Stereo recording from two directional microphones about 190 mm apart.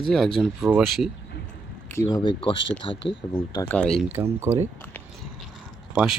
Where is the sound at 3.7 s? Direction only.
5° left (ahead or behind).